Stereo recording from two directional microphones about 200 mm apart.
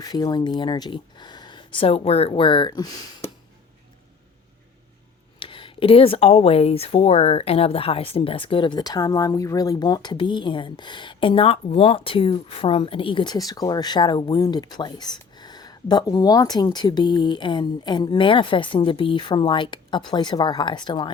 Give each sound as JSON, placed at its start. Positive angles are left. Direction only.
{"t": 0.0, "sound": "speech", "side_deg": 20}
{"t": 5.4, "sound": "speech", "side_deg": 25}